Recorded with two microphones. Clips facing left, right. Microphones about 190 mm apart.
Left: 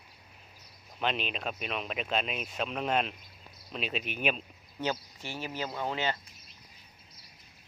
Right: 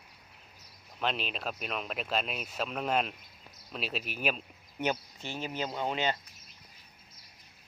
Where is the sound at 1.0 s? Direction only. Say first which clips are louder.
Left 1 dB; centre (ahead or behind).